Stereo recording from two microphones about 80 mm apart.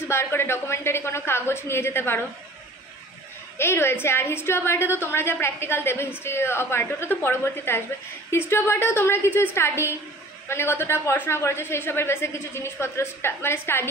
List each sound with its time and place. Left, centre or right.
0.0 s a man's voice: left
3.5 s a man's voice: left